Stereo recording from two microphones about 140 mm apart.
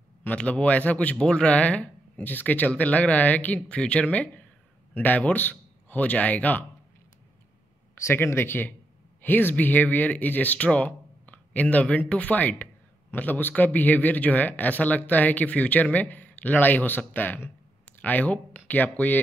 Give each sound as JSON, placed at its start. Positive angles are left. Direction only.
{"t": 0.2, "sound": "a man's voice", "side_deg": 10}
{"t": 7.9, "sound": "a man's voice", "side_deg": 15}